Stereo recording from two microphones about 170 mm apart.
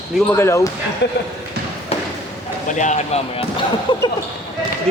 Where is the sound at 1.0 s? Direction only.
90° left.